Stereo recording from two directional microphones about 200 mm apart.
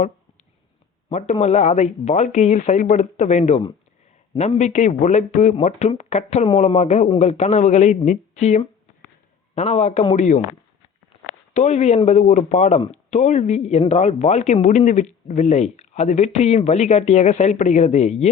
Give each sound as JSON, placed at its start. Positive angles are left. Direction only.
{"t": 1.1, "sound": "speech", "side_deg": 35}
{"t": 11.5, "sound": "speech", "side_deg": 35}